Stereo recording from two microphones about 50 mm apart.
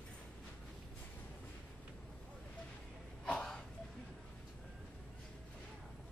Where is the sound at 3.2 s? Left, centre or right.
Centre.